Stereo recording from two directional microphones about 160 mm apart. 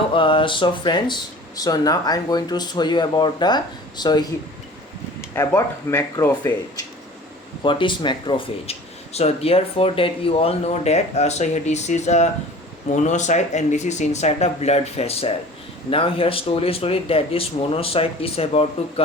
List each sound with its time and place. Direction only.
0.1 s speech: 30° left (ahead or behind)
5.5 s speech: 15° left (ahead or behind)
7.6 s speech: 30° left (ahead or behind)